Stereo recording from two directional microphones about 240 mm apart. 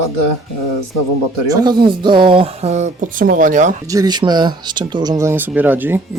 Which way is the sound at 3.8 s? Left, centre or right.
Centre.